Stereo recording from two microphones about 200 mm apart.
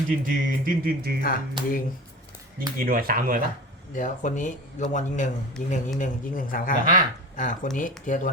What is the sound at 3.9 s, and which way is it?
Speech, 40° left (ahead or behind).